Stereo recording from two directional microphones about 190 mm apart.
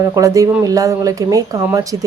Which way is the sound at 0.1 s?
15° right (ahead or behind).